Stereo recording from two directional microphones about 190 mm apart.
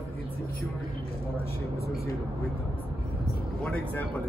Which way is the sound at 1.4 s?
55° left (ahead or behind).